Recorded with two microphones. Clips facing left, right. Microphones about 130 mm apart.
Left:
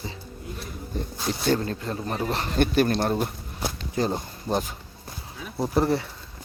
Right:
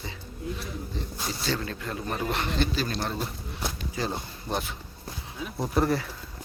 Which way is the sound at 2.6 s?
55° left (ahead or behind).